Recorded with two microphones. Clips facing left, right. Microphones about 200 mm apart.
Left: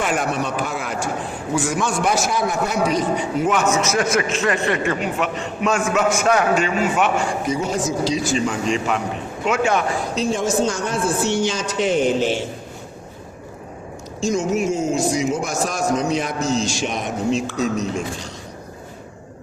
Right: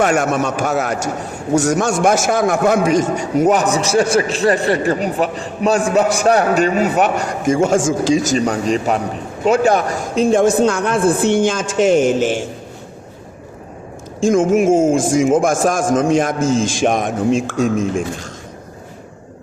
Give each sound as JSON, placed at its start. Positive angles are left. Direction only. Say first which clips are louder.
{"t": 0.0, "sound": "a man's voice", "louder": "right 6 dB", "side_deg": -45}
{"t": 14.2, "sound": "a man's voice", "louder": "right 7 dB", "side_deg": -50}